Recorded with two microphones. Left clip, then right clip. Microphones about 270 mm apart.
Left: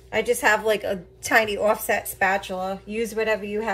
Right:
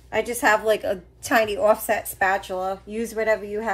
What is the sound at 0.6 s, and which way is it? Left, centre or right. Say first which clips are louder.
Speech: right 1 dB; centre.